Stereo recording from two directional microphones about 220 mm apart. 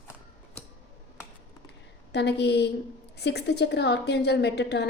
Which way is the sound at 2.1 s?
50° left (ahead or behind).